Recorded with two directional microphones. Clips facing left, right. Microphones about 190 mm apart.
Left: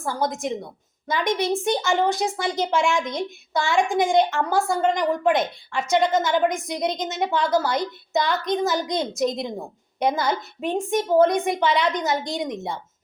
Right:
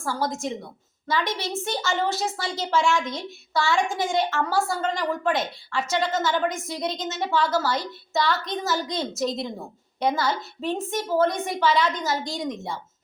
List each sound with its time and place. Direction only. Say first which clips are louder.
0.0 s a woman's voice: left 2 dB; 20° left (ahead or behind)